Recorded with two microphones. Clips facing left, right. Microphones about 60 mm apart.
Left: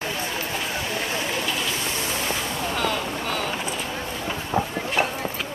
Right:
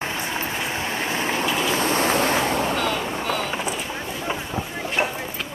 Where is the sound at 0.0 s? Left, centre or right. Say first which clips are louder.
Right 1 dB; right.